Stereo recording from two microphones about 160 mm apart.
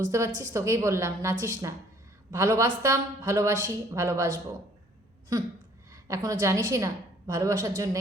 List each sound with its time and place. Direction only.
0.0 s speech: 20° right (ahead or behind)
5.9 s a sound: 20° right (ahead or behind)
6.4 s speech: 20° right (ahead or behind)